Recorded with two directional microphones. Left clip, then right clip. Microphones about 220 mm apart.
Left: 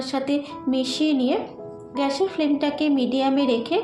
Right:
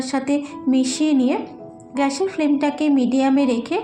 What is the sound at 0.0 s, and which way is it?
A woman's voice, 25° right (ahead or behind).